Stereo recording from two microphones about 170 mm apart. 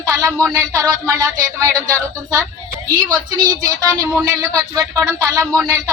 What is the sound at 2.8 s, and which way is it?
Speech, 20° right (ahead or behind).